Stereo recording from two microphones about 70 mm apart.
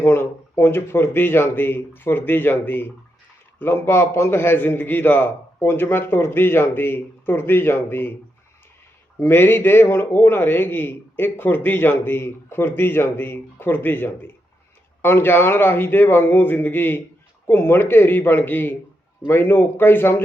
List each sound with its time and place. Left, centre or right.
0.0 s a man's voice: left
9.2 s a man's voice: left